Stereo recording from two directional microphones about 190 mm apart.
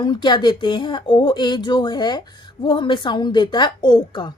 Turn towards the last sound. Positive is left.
turn(degrees=25)  # may be behind; listen again after turning